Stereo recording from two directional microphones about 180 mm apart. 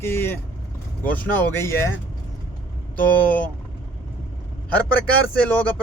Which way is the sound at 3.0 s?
10° left (ahead or behind).